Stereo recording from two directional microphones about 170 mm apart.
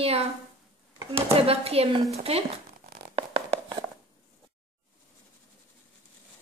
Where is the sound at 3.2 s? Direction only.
30° right (ahead or behind).